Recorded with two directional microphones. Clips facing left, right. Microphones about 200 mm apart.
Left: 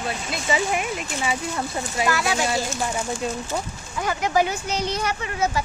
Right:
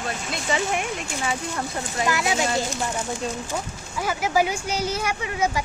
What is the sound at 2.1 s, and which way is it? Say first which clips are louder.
Speech: right 1 dB; 20° right (ahead or behind).